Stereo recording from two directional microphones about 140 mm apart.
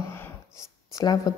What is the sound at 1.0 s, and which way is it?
Speech, 30° left (ahead or behind).